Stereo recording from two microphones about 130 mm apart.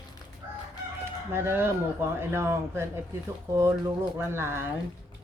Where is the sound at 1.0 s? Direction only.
20° right (ahead or behind).